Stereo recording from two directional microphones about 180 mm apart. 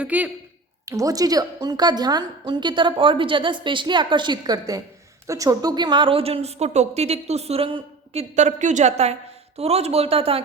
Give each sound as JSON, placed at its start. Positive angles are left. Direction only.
{"t": 0.0, "sound": "a woman's voice", "side_deg": -10}
{"t": 0.9, "sound": "a woman's voice", "side_deg": -20}